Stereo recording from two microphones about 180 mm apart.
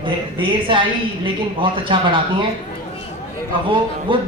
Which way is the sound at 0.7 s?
30° right (ahead or behind).